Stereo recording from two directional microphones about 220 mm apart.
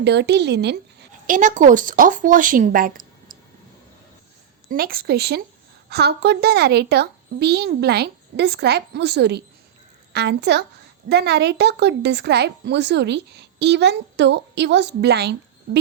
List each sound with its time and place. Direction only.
0.0 s speech: 50° right (ahead or behind)
1.4 s speech: 35° right (ahead or behind)
4.7 s a woman's voice: 40° right (ahead or behind)